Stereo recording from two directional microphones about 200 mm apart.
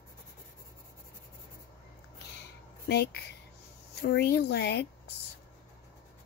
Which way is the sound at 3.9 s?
55° left (ahead or behind).